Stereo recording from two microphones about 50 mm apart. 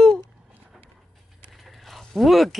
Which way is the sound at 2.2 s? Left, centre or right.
Centre.